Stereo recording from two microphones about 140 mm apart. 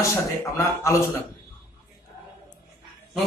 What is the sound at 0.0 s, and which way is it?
Speech, 20° left (ahead or behind).